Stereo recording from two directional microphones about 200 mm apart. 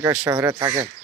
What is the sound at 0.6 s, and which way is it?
Speech, 30° right (ahead or behind).